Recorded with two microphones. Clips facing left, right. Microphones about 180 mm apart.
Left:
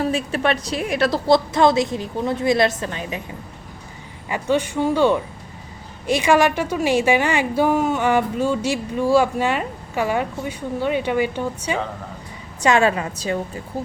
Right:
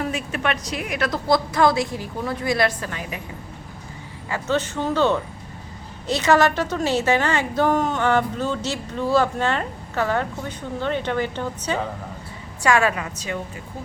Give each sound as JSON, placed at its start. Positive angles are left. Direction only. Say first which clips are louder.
{"t": 0.0, "sound": "a woman's voice", "louder": "left 4 dB", "side_deg": 30}
{"t": 4.3, "sound": "a woman's voice", "louder": "left 3 dB", "side_deg": 15}
{"t": 12.6, "sound": "a woman's voice", "louder": "left 3 dB", "side_deg": 25}